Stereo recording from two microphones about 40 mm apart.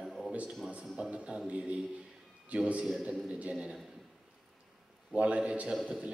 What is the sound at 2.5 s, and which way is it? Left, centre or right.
A man's voice, right.